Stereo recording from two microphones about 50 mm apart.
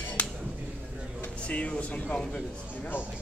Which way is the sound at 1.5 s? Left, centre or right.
Left.